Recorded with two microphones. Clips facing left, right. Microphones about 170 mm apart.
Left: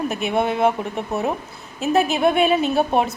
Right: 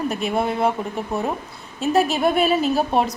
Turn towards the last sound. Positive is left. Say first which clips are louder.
# left 1 dB
turn(degrees=0)  # may be behind; listen again after turning